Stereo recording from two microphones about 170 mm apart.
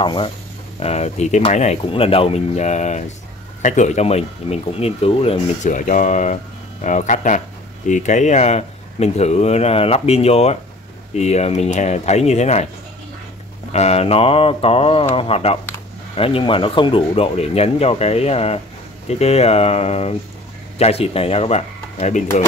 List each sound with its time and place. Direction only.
0.0 s speech: 30° left (ahead or behind)
13.7 s speech: 40° left (ahead or behind)